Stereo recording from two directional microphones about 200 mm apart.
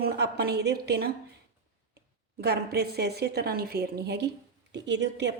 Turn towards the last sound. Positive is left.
turn(degrees=-60)  # may be behind; listen again after turning